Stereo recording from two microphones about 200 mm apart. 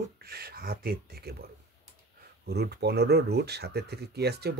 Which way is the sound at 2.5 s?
55° right (ahead or behind).